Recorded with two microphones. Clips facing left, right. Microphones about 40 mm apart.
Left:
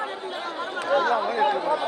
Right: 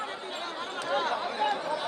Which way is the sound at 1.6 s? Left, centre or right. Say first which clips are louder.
Left 8 dB; left.